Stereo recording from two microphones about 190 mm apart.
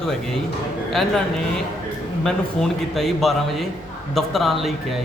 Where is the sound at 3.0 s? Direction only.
Centre (ahead or behind).